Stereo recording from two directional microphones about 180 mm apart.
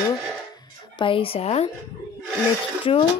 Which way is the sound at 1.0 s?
30° left (ahead or behind).